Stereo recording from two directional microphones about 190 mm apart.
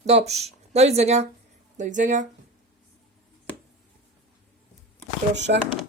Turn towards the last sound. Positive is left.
turn(degrees=-70)  # may be behind; listen again after turning